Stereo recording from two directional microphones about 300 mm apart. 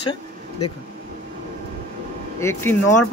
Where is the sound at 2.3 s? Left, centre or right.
Centre.